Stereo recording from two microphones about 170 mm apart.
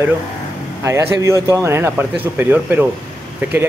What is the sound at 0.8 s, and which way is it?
Speech, 15° right (ahead or behind).